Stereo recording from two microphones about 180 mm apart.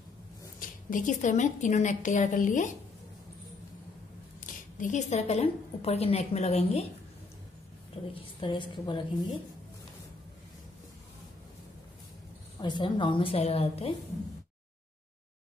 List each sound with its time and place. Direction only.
0.6 s a woman's voice: 50° left (ahead or behind)
4.5 s a woman's voice: 45° left (ahead or behind)
7.9 s a woman's voice: 30° left (ahead or behind)
12.5 s a woman's voice: 25° left (ahead or behind)